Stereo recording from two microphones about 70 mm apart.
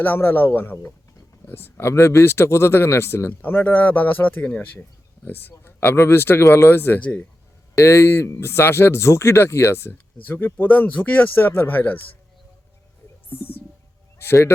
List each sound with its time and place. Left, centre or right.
0.0 s speech: left
3.4 s speech: left
7.0 s speech: centre
7.8 s speech: left
9.9 s speech: left
14.2 s speech: left